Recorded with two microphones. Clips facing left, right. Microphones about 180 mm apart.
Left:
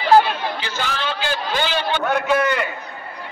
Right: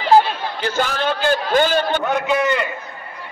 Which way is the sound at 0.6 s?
50° right (ahead or behind).